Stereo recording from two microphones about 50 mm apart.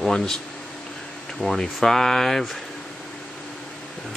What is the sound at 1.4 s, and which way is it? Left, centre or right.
Speech, centre.